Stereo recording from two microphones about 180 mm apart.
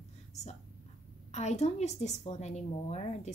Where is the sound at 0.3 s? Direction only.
40° left (ahead or behind).